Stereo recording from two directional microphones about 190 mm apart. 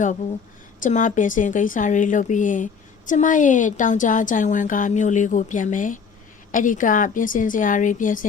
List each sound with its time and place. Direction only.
0.8 s a woman's voice: 40° left (ahead or behind)